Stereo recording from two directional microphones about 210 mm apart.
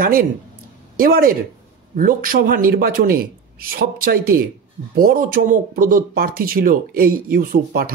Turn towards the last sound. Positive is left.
turn(degrees=-45)  # may be behind; listen again after turning